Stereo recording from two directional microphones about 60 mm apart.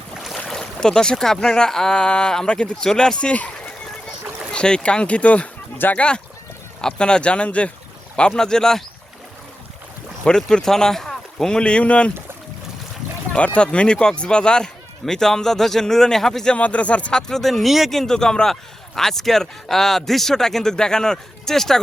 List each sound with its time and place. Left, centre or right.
0.4 s speech: centre
4.5 s speech: centre
5.7 s speech: left
6.0 s speech: centre
10.2 s speech: centre
13.3 s speech: centre
16.6 s speech: left; by 21.8 s centre